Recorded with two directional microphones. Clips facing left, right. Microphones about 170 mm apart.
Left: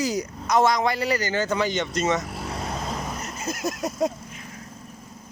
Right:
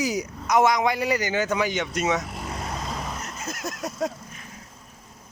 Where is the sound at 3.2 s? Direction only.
5° left (ahead or behind).